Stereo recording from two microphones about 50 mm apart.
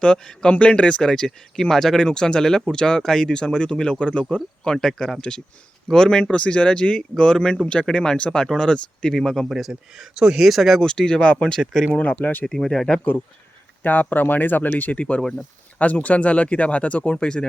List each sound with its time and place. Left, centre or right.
0.0 s speech: centre
9.5 s speech: centre
10.8 s speech: centre
12.2 s speech: left
12.5 s speech: centre
13.8 s speech: left
15.2 s speech: centre
15.8 s speech: left